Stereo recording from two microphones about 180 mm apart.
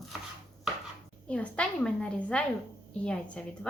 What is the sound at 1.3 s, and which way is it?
Speech, 5° left (ahead or behind).